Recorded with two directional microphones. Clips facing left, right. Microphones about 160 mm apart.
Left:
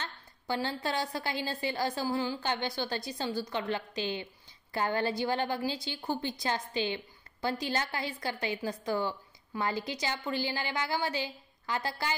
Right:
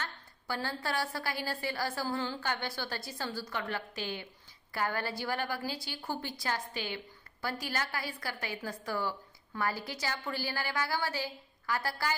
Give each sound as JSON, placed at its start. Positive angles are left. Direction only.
{"t": 0.0, "sound": "a woman's voice", "side_deg": 20}